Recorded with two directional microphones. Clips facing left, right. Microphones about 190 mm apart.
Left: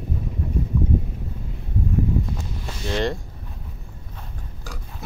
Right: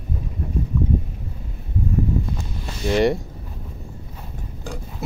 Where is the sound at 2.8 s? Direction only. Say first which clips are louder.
Right 6 dB; 15° right (ahead or behind).